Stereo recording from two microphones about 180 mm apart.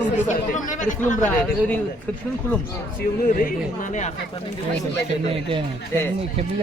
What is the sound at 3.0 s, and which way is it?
Speech, 50° left (ahead or behind).